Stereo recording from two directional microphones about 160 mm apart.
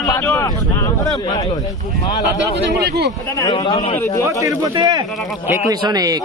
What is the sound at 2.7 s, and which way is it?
Speech, 90° right.